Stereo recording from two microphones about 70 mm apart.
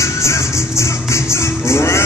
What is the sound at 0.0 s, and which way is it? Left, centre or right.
Music, left.